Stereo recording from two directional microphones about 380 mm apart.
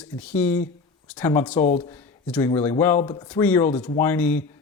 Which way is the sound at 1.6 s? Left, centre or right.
Centre.